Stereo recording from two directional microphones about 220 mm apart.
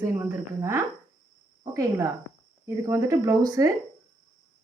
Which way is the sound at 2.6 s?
15° right (ahead or behind).